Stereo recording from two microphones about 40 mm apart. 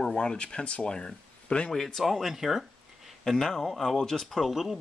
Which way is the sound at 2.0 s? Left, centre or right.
Centre.